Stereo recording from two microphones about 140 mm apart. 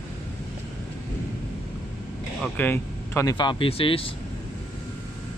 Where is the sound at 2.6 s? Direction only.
15° left (ahead or behind).